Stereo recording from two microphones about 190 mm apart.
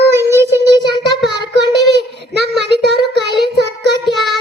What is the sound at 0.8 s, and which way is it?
Child singing, 65° right (ahead or behind).